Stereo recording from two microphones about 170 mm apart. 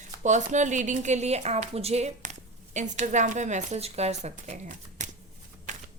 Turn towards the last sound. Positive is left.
turn(degrees=-45)  # may be behind; listen again after turning